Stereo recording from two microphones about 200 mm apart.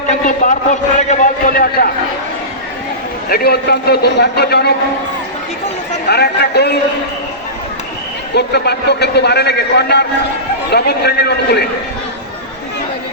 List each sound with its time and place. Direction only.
0.1 s a man's voice: 40° left (ahead or behind)
3.2 s a man's voice: 50° left (ahead or behind)
6.1 s a man's voice: 55° left (ahead or behind)
8.4 s a man's voice: 55° left (ahead or behind)